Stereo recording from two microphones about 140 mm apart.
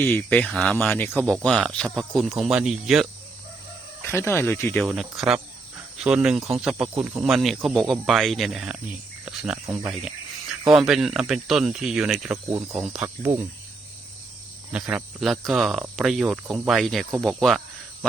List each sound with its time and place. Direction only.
0.0 s speech: 15° left (ahead or behind)
1.4 s speech: centre (ahead or behind)
4.0 s speech: 15° left (ahead or behind)
4.8 s speech: centre (ahead or behind)
12.5 s speech: 20° right (ahead or behind)
12.8 s speech: 5° right (ahead or behind)
14.7 s speech: 5° right (ahead or behind)